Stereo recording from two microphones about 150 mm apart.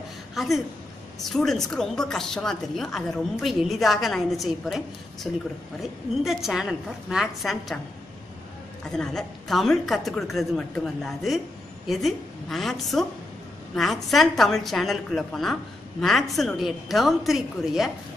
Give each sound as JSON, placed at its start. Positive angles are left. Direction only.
{"t": 0.3, "sound": "a sound", "side_deg": 0}
{"t": 1.3, "sound": "a woman's voice", "side_deg": 0}
{"t": 8.9, "sound": "a woman's voice", "side_deg": 5}